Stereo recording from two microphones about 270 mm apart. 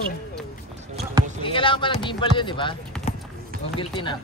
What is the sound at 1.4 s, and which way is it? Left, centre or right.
Speech, centre.